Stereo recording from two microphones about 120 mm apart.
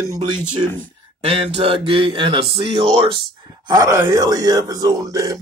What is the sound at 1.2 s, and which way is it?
Speech, 50° right (ahead or behind).